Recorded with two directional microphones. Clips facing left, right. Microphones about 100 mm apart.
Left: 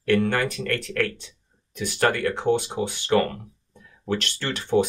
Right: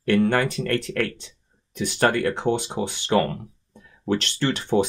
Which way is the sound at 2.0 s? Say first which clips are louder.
Right 1 dB; 25° right (ahead or behind).